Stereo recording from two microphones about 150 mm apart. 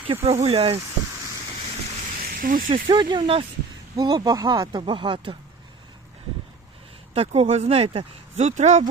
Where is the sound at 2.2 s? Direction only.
70° right (ahead or behind).